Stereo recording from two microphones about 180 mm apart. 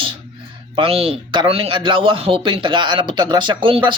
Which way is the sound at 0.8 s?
35° right (ahead or behind).